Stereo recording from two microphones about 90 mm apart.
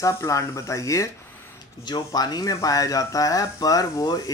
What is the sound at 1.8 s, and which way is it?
Speech, 55° left (ahead or behind).